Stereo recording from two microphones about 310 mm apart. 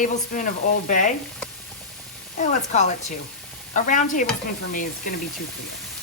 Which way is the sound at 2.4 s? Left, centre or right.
Left.